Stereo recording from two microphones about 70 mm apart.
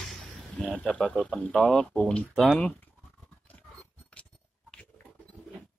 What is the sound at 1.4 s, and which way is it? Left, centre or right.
Speech, centre.